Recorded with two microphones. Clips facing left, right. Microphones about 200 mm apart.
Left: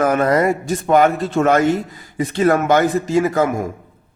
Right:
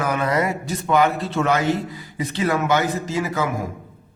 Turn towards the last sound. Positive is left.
turn(degrees=50)  # may be behind; listen again after turning